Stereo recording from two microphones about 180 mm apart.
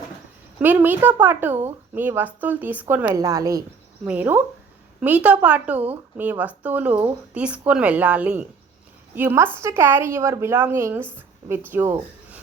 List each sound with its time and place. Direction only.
0.6 s speech: 10° right (ahead or behind)